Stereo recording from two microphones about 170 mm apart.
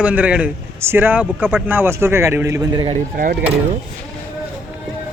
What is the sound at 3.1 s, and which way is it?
Speech, 55° right (ahead or behind).